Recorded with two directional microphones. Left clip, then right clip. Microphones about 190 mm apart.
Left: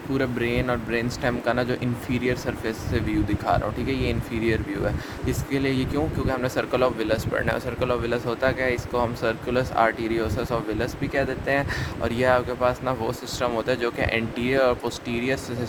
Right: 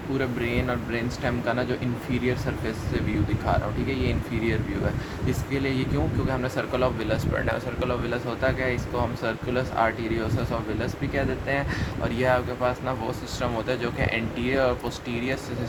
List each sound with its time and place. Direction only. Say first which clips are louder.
0.2 s speech: left 3 dB; 55° left (ahead or behind)